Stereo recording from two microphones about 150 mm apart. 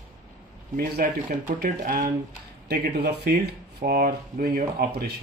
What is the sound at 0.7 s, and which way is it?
Speech, 90° right.